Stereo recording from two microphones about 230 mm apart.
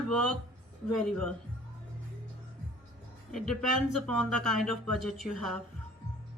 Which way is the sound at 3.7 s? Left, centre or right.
Right.